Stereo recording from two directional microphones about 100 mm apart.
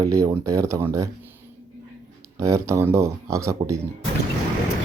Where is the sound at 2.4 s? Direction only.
30° right (ahead or behind).